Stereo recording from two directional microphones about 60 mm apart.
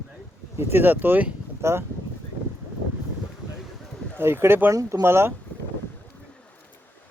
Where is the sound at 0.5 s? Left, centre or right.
Right.